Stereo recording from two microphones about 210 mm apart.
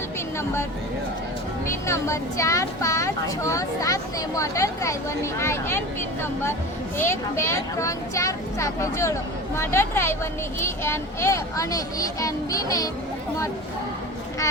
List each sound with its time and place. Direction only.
1.6 s speech: 15° left (ahead or behind)
6.9 s speech: 10° left (ahead or behind)